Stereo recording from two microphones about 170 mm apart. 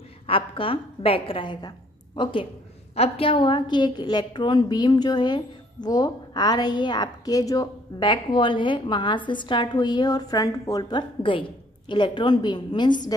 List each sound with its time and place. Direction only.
0.3 s a woman's voice: 30° left (ahead or behind)